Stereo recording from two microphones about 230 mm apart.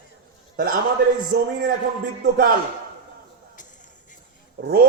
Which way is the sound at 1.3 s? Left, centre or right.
Right.